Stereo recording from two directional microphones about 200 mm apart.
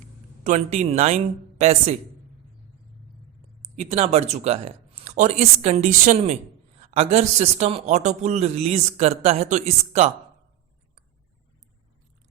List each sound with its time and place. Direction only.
0.4 s speech: 35° right (ahead or behind)
3.6 s speech: 30° right (ahead or behind)